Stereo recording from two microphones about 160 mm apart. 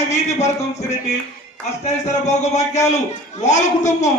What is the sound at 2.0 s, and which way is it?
A man's voice, 45° left (ahead or behind).